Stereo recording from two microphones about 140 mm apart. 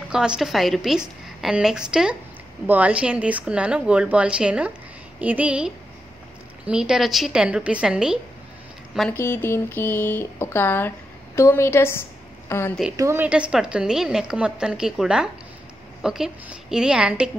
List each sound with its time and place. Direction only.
0.1 s a woman's voice: 5° right (ahead or behind)
9.1 s a woman's voice: 15° left (ahead or behind)
12.9 s a woman's voice: 20° right (ahead or behind)